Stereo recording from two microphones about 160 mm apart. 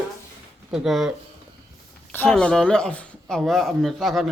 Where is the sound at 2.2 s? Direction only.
5° left (ahead or behind).